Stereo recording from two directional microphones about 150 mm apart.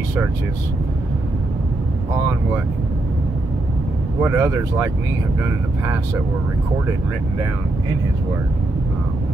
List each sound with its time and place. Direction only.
4.2 s speech: 15° right (ahead or behind)